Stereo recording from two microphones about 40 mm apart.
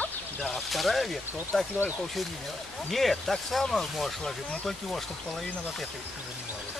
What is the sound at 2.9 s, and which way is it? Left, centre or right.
Speech, centre.